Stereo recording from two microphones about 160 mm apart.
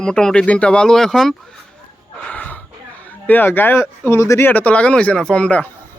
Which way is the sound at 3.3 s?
10° left (ahead or behind).